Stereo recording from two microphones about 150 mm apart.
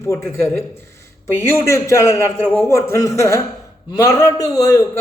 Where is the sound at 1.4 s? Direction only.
20° left (ahead or behind).